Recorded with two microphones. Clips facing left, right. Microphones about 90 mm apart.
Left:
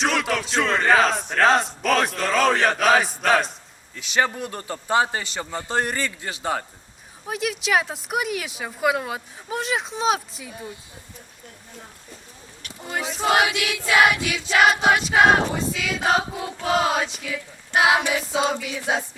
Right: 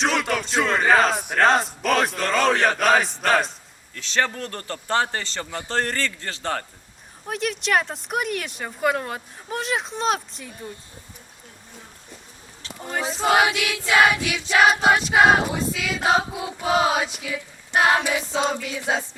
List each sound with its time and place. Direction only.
0.0 s speech: centre (ahead or behind)
3.9 s a man's voice: 10° left (ahead or behind)
13.7 s choir: 25° right (ahead or behind)
14.0 s speech: 5° left (ahead or behind)